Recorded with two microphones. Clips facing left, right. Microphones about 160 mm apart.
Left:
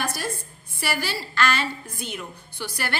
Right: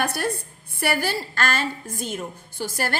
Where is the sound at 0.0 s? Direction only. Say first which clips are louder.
Right 4 dB; 65° right (ahead or behind).